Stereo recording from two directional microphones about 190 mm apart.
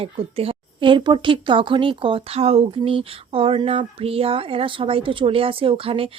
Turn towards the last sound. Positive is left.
turn(degrees=-30)  # may be behind; listen again after turning